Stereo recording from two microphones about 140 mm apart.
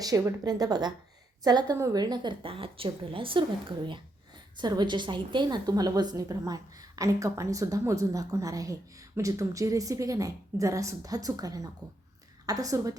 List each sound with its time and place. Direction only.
0.0 s a woman's voice: 25° right (ahead or behind)
4.5 s a woman's voice: 30° right (ahead or behind)